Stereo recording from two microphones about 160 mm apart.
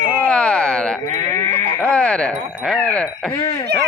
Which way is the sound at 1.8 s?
5° left (ahead or behind).